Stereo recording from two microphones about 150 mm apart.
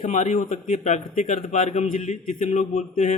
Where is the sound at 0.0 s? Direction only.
50° left (ahead or behind).